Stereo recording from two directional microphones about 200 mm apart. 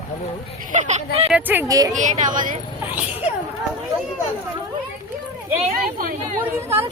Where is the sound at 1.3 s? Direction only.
10° right (ahead or behind).